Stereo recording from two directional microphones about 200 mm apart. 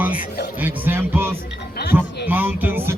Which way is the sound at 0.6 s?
10° right (ahead or behind).